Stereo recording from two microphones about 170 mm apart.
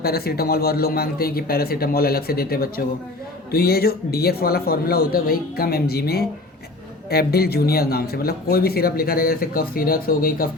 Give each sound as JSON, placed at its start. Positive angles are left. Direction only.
{"t": 0.0, "sound": "speech", "side_deg": 65}